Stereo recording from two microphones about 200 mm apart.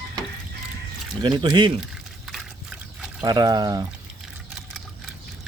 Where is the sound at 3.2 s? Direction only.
20° right (ahead or behind).